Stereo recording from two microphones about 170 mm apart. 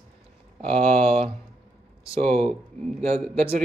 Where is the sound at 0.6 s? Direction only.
35° right (ahead or behind).